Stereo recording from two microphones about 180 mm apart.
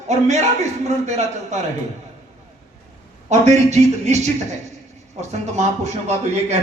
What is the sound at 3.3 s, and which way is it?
A man's voice, 40° right (ahead or behind).